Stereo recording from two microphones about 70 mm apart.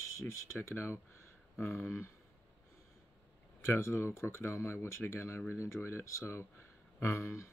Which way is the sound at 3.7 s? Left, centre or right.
Left.